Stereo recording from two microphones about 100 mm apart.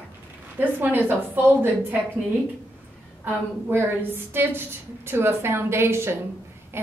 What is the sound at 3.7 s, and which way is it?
A woman's voice, 20° right (ahead or behind).